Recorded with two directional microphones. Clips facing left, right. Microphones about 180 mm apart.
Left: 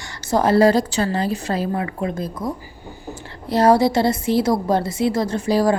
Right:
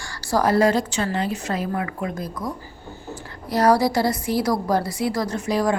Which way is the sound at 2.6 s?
15° left (ahead or behind).